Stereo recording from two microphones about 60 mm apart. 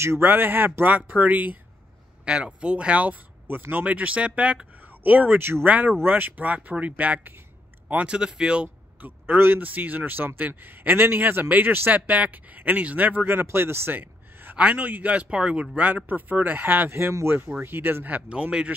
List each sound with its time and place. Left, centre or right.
0.0 s speech: right
0.3 s speech: right
2.2 s speech: centre
3.4 s speech: right
5.7 s speech: right
9.0 s speech: right
16.9 s speech: right; by 18.7 s centre